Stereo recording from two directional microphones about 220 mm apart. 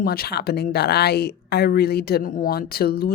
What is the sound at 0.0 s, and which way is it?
Speech, 45° left (ahead or behind).